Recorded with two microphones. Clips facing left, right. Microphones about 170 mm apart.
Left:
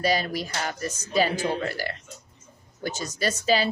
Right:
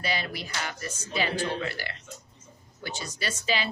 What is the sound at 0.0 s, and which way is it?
A man's voice, 40° left (ahead or behind).